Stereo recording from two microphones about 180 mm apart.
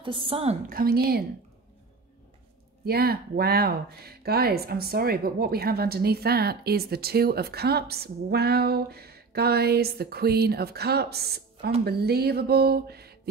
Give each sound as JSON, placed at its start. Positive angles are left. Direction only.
{"t": 0.0, "sound": "a woman's voice", "side_deg": -30}
{"t": 0.7, "sound": "speech", "side_deg": -55}
{"t": 2.8, "sound": "speech", "side_deg": -60}